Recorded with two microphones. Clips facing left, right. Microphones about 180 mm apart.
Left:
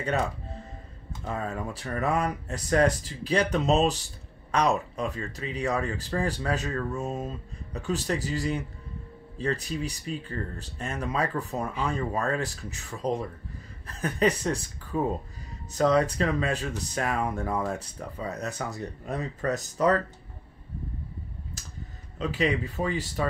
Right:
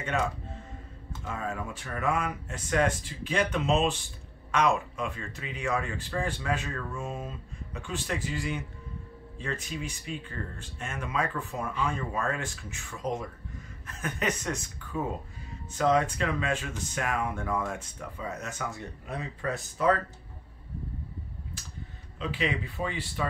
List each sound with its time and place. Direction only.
0.0 s speech: 35° left (ahead or behind)
22.2 s speech: 40° left (ahead or behind)